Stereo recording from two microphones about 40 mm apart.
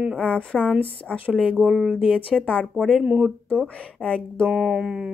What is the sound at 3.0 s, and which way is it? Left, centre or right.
Speech, right.